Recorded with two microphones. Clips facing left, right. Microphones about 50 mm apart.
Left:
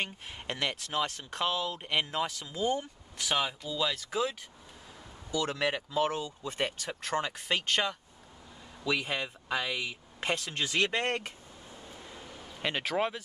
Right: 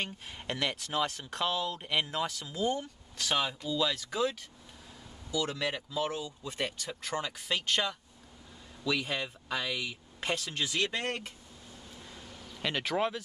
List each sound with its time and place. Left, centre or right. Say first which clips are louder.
0.0 s speech: left 1 dB; centre
1.3 s speech: left 3 dB; centre
5.4 s speech: left 3 dB; centre
5.9 s speech: left 4 dB; left
6.9 s speech: left 3 dB; left
12.0 s a sound: left 1 dB; centre